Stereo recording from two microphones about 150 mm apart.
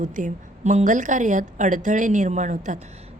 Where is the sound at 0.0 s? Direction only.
55° right (ahead or behind).